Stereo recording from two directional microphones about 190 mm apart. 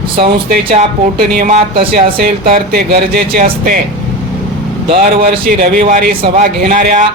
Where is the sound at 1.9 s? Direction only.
55° right (ahead or behind).